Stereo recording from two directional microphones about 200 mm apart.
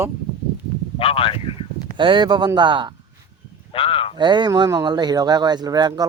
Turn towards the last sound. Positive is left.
turn(degrees=-20)  # may be behind; listen again after turning